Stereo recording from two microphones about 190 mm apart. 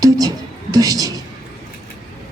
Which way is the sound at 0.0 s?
20° right (ahead or behind).